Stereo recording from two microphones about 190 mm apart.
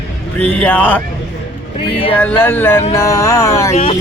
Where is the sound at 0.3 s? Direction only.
5° left (ahead or behind).